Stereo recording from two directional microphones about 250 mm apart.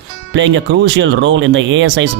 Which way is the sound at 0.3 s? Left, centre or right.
Right.